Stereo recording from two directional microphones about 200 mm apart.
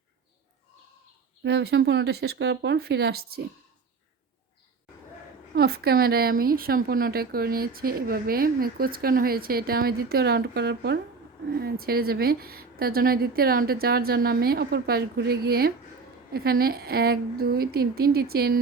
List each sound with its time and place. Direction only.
1.5 s speech: 55° right (ahead or behind)
5.5 s speech: 50° right (ahead or behind)